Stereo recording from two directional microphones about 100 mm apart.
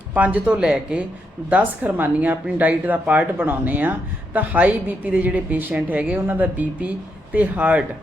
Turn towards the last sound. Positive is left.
turn(degrees=-15)  # may be behind; listen again after turning